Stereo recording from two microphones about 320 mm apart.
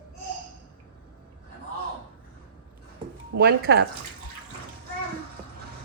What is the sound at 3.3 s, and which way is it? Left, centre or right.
Speech, right.